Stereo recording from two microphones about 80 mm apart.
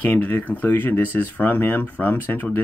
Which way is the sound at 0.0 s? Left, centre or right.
Centre.